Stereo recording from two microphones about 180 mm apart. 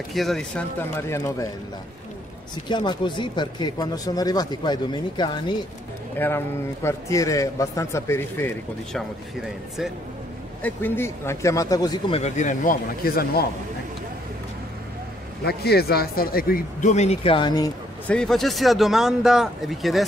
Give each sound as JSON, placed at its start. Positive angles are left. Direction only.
{"t": 0.1, "sound": "a man's voice", "side_deg": 0}
{"t": 2.7, "sound": "speech", "side_deg": 25}
{"t": 6.1, "sound": "a man's voice", "side_deg": 10}
{"t": 8.9, "sound": "speech", "side_deg": 0}
{"t": 10.6, "sound": "a man's voice", "side_deg": 10}
{"t": 12.2, "sound": "speech", "side_deg": 45}
{"t": 15.4, "sound": "speech", "side_deg": 60}
{"t": 16.9, "sound": "speech", "side_deg": 35}
{"t": 18.0, "sound": "speech", "side_deg": 5}